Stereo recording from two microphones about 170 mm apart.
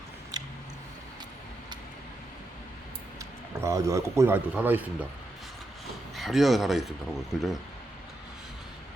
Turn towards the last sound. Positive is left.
turn(degrees=0)  # may be behind; listen again after turning